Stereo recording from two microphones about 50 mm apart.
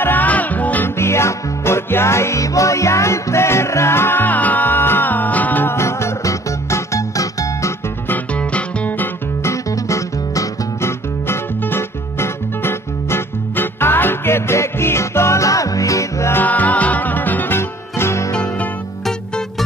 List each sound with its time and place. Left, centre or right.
0.0 s music: left
0.8 s music: left
5.7 s music: left
8.4 s music: left
9.4 s music: left
11.6 s music: left
16.4 s music: left
17.6 s music: left
18.3 s music: left